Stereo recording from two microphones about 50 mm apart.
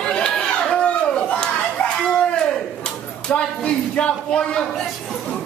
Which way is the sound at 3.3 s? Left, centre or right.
Left.